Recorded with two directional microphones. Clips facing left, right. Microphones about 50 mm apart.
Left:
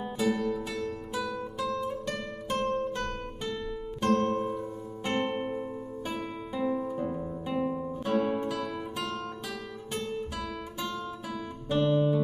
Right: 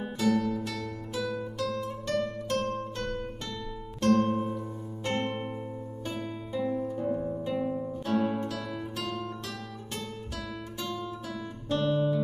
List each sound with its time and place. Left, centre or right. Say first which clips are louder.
0.2 s music: right 2 dB; centre
4.1 s music: right 1 dB; centre
7.7 s music: left 1 dB; centre
10.3 s guitar: left 2 dB; centre